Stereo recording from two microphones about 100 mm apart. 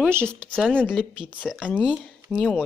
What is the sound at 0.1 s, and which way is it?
Speech, 20° right (ahead or behind).